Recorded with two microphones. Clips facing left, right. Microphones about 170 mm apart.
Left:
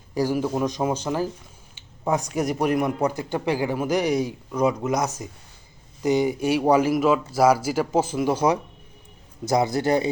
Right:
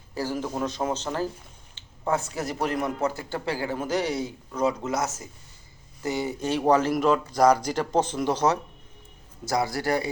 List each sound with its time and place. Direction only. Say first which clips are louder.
0.1 s speech: left 6 dB; 15° left (ahead or behind)
9.4 s a man's voice: left 5 dB; 20° left (ahead or behind)